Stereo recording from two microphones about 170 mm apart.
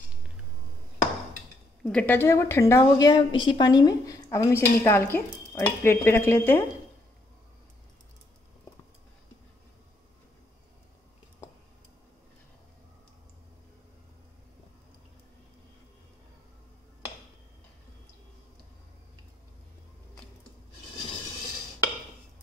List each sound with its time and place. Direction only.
1.8 s a woman's voice: 5° left (ahead or behind)